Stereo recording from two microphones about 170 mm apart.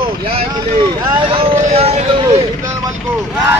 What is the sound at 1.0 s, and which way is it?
Speech, 30° right (ahead or behind).